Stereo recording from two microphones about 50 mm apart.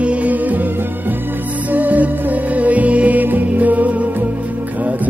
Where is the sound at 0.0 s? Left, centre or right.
Right.